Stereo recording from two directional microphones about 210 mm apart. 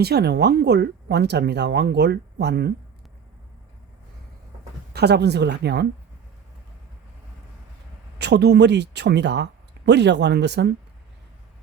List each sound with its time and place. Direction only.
0.0 s speech: 50° right (ahead or behind)
4.9 s speech: 50° right (ahead or behind)
8.2 s speech: 50° right (ahead or behind)